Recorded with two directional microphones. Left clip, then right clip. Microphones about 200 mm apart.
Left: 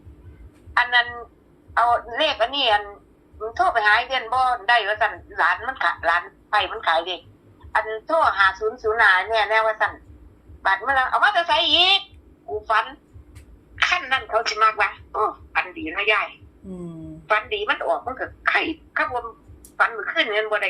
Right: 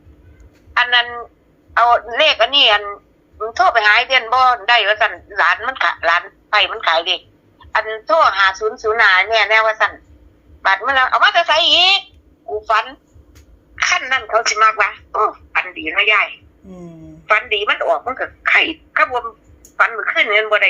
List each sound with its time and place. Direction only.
0.7 s a woman's voice: 20° right (ahead or behind)